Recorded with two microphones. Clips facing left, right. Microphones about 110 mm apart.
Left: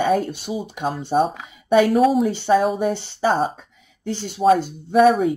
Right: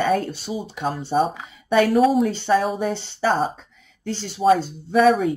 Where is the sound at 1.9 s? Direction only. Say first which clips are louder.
Even; centre (ahead or behind).